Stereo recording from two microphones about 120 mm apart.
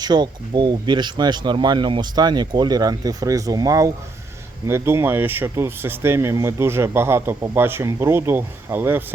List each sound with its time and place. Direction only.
0.0 s speech: 40° right (ahead or behind); by 9.0 s 15° right (ahead or behind)